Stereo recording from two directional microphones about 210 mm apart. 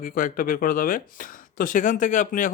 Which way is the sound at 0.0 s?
40° left (ahead or behind).